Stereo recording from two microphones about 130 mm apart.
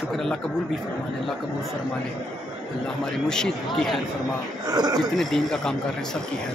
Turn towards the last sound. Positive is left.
turn(degrees=5)  # may be behind; listen again after turning